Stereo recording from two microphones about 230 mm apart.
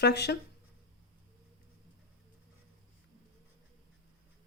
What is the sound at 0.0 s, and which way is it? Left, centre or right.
Speech, left.